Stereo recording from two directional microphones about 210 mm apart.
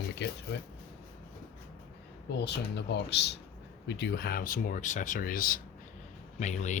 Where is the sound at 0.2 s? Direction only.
55° left (ahead or behind).